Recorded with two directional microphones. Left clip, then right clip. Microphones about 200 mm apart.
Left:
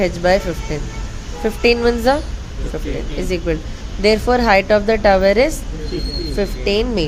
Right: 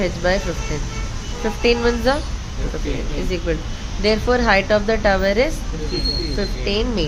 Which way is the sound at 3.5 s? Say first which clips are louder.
Left 2 dB; 20° left (ahead or behind).